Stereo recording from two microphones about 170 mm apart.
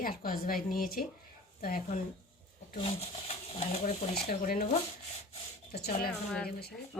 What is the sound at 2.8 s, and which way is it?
Speech, 35° left (ahead or behind).